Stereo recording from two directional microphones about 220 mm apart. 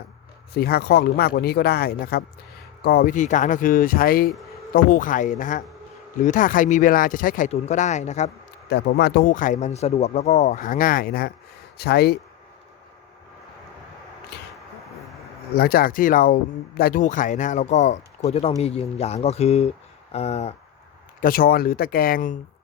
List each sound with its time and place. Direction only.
0.5 s speech: 45° left (ahead or behind)
8.7 s speech: 50° left (ahead or behind)
14.3 s a sound: 50° left (ahead or behind)
15.5 s speech: 45° left (ahead or behind)
21.2 s speech: 40° left (ahead or behind)